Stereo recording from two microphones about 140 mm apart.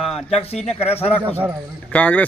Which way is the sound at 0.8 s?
45° left (ahead or behind).